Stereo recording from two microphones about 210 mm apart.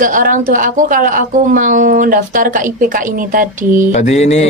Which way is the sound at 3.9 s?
35° left (ahead or behind).